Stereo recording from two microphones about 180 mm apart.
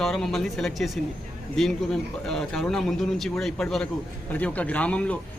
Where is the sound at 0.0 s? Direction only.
Centre (ahead or behind).